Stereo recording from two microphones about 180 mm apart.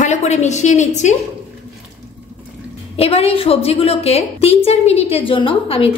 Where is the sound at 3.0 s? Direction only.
35° left (ahead or behind).